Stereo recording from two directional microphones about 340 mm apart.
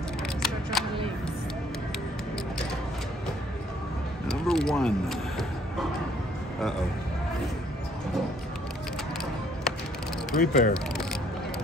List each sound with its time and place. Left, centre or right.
0.4 s a sound: centre
4.3 s speech: centre
10.3 s speech: left